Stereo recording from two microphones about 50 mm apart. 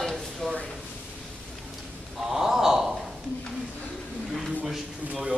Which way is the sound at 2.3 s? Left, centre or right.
Centre.